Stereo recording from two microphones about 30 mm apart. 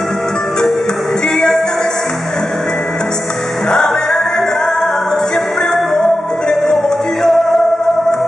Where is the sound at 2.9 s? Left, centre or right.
Left.